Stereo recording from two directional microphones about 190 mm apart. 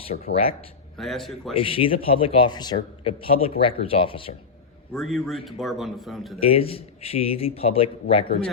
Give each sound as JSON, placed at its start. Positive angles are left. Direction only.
{"t": 0.1, "sound": "speech", "side_deg": 55}
{"t": 0.9, "sound": "a man's voice", "side_deg": 0}
{"t": 1.5, "sound": "a man's voice", "side_deg": 30}
{"t": 4.9, "sound": "a man's voice", "side_deg": 0}
{"t": 6.4, "sound": "a man's voice", "side_deg": 30}